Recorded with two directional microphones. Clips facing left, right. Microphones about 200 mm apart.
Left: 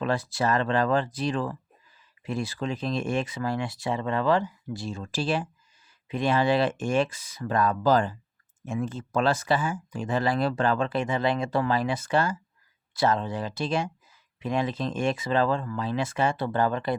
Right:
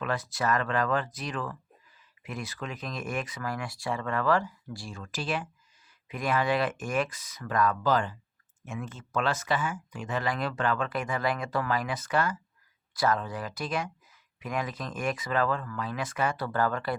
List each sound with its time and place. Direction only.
0.0 s speech: 30° left (ahead or behind)